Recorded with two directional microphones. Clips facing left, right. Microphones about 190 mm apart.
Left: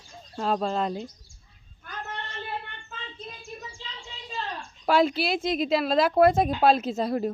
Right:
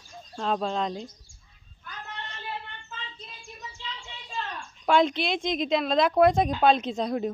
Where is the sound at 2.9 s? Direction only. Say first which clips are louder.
Left 5 dB; 50° left (ahead or behind).